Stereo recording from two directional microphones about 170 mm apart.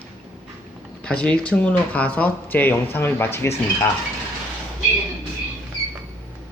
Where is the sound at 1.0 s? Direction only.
5° left (ahead or behind).